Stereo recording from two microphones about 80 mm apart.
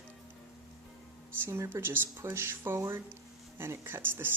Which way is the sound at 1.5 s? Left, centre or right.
Right.